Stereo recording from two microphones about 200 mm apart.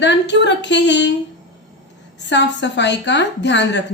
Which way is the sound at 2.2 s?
60° left (ahead or behind).